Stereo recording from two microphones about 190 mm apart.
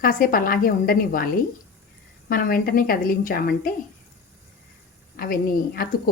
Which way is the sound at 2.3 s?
50° left (ahead or behind).